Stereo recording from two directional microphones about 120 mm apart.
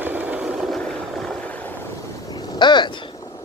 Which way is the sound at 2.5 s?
40° left (ahead or behind).